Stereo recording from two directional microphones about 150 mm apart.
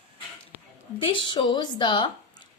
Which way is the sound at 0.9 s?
35° left (ahead or behind).